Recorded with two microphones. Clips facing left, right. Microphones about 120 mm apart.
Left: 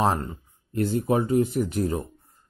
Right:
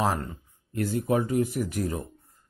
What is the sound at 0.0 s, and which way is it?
Speech, 25° left (ahead or behind).